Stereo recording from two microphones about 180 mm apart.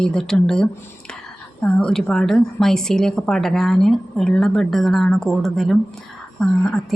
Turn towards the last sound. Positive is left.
turn(degrees=5)  # may be behind; listen again after turning